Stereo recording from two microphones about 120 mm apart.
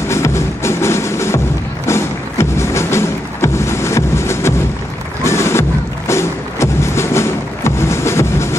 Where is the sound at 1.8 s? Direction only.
25° left (ahead or behind).